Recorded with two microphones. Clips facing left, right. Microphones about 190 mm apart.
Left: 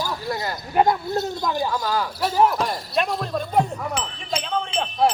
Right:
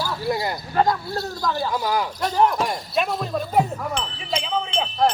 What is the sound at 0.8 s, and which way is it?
Speech, 20° left (ahead or behind).